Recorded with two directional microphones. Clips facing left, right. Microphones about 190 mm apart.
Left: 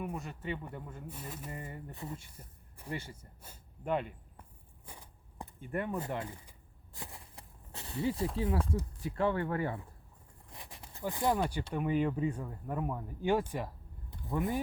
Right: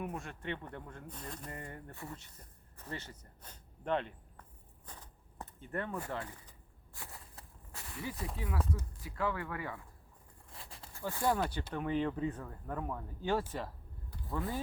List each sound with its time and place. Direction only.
0.1 s speech: 5° left (ahead or behind)
1.9 s speech: 20° left (ahead or behind)
4.9 s a sound: 10° left (ahead or behind)
6.9 s walk: 20° left (ahead or behind)
8.4 s speech: 30° left (ahead or behind)
10.5 s a sound: 15° left (ahead or behind)
11.7 s speech: 10° left (ahead or behind)